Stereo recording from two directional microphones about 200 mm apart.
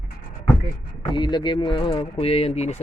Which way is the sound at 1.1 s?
20° left (ahead or behind).